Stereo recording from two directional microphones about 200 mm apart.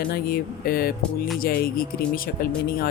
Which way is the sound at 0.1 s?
45° left (ahead or behind).